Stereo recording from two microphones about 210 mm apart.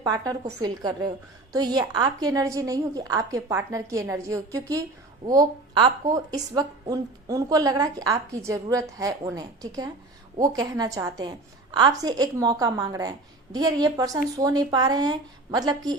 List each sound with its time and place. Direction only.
0.0 s a woman's voice: 15° right (ahead or behind)